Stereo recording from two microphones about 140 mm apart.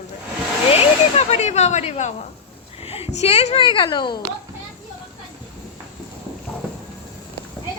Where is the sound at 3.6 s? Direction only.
35° left (ahead or behind).